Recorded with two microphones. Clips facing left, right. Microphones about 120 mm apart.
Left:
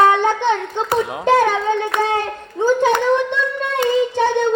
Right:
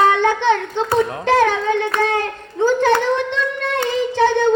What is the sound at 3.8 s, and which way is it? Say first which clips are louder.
Child singing: left 1 dB; 15° left (ahead or behind).